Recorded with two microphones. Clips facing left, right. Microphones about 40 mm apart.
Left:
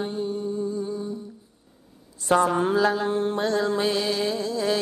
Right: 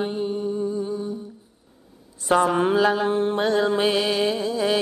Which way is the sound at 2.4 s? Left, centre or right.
Right.